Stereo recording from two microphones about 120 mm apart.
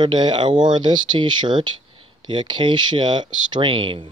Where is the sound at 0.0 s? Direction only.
40° right (ahead or behind).